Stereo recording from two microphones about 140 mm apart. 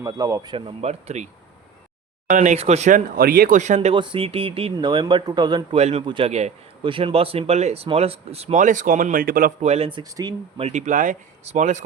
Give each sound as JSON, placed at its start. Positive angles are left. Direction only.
{"t": 0.0, "sound": "speech", "side_deg": -25}
{"t": 0.5, "sound": "a man's voice", "side_deg": -45}
{"t": 2.3, "sound": "speech", "side_deg": -60}
{"t": 3.2, "sound": "speech", "side_deg": -90}
{"t": 3.8, "sound": "speech", "side_deg": -35}
{"t": 5.7, "sound": "a man's voice", "side_deg": -50}
{"t": 8.6, "sound": "speech", "side_deg": -65}
{"t": 9.6, "sound": "a man's voice", "side_deg": -45}
{"t": 10.0, "sound": "speech", "side_deg": -25}
{"t": 10.6, "sound": "speech", "side_deg": -55}